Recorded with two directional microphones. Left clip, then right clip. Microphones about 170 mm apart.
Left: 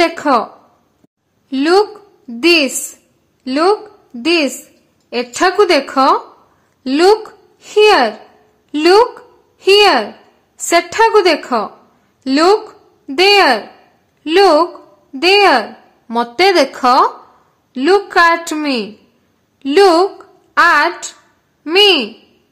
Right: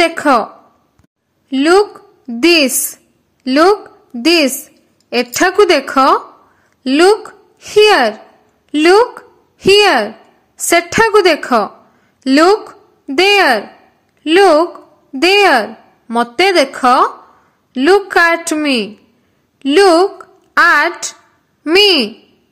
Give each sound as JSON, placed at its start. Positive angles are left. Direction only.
{"t": 0.0, "sound": "a woman's voice", "side_deg": -10}
{"t": 1.5, "sound": "a woman's voice", "side_deg": -10}
{"t": 16.2, "sound": "a woman's voice", "side_deg": -10}